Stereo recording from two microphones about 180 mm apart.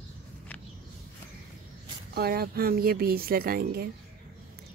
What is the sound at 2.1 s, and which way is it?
Speech, 60° right (ahead or behind).